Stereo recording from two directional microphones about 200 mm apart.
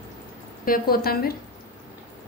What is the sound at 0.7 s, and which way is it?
Speech, 50° left (ahead or behind).